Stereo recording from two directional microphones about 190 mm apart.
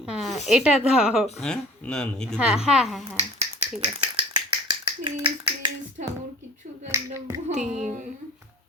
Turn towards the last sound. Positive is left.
turn(degrees=-5)  # may be behind; listen again after turning